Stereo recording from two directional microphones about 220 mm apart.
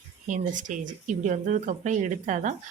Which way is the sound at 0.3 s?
35° right (ahead or behind).